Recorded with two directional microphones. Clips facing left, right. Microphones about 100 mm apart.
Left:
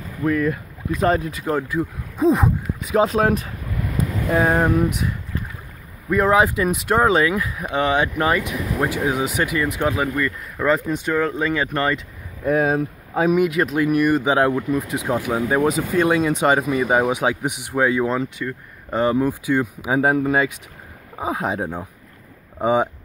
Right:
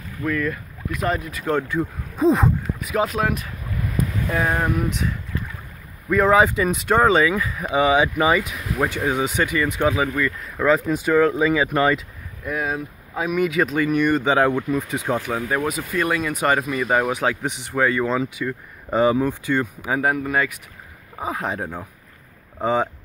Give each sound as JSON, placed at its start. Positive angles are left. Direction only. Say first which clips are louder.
{"t": 0.2, "sound": "speech", "louder": "left 4 dB", "side_deg": 20}
{"t": 1.4, "sound": "speech", "louder": "even", "side_deg": 5}
{"t": 2.8, "sound": "speech", "louder": "left 5 dB", "side_deg": 30}
{"t": 4.8, "sound": "speech", "louder": "left 2 dB", "side_deg": 5}
{"t": 12.4, "sound": "speech", "louder": "left 7 dB", "side_deg": 35}
{"t": 13.4, "sound": "speech", "louder": "left 1 dB", "side_deg": 5}
{"t": 15.5, "sound": "speech", "louder": "left 6 dB", "side_deg": 25}
{"t": 18.1, "sound": "speech", "louder": "right 1 dB", "side_deg": -5}
{"t": 19.2, "sound": "speech", "louder": "left 2 dB", "side_deg": 10}